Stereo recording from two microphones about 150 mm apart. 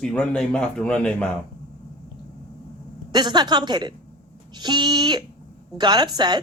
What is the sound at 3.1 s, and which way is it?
A woman's voice, 30° right (ahead or behind).